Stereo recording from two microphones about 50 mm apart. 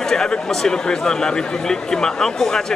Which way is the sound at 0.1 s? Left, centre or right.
Centre.